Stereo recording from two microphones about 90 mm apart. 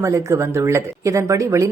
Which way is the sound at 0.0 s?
35° right (ahead or behind).